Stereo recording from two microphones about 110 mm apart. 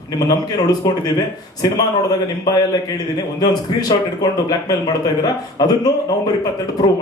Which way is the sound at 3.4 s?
40° left (ahead or behind).